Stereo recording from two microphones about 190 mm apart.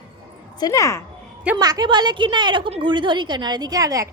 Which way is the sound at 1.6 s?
20° right (ahead or behind).